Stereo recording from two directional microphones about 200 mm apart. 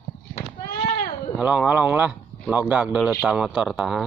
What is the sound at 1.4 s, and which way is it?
Speech, 5° right (ahead or behind).